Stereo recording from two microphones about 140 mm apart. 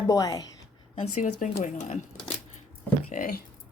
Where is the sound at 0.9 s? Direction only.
55° left (ahead or behind).